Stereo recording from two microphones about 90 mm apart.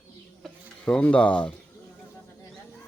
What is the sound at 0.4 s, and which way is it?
Speech, 10° left (ahead or behind).